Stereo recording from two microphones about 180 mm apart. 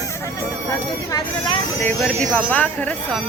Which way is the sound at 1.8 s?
10° left (ahead or behind).